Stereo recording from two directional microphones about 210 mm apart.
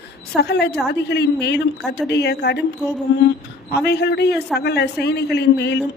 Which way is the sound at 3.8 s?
50° left (ahead or behind).